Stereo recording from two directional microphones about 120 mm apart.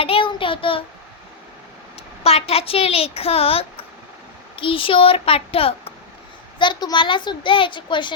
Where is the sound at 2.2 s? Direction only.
60° left (ahead or behind).